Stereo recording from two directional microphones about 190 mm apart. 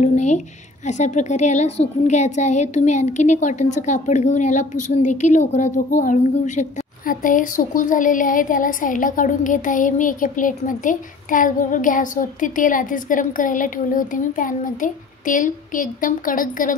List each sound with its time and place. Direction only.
0.0 s a woman's voice: 35° left (ahead or behind)